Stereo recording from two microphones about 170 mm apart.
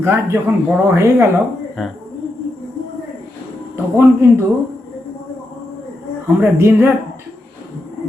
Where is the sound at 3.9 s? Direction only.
15° right (ahead or behind).